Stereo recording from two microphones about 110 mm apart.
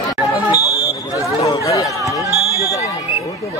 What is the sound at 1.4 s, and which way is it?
Chatter, 30° left (ahead or behind).